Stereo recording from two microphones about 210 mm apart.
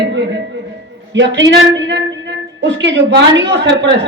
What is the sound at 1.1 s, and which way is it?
A man's voice, 60° right (ahead or behind).